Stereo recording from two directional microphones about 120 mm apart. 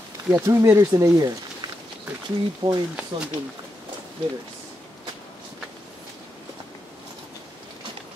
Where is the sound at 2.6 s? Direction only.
45° right (ahead or behind).